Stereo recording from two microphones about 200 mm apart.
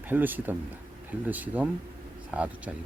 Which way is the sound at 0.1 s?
10° right (ahead or behind).